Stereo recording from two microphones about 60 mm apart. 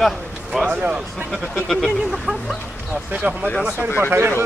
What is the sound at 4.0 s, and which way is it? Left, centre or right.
Speech, right.